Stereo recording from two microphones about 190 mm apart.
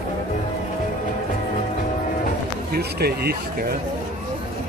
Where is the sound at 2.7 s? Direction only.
55° right (ahead or behind).